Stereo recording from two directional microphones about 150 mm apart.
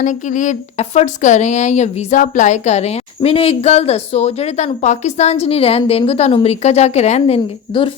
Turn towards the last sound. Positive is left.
turn(degrees=40)  # may be behind; listen again after turning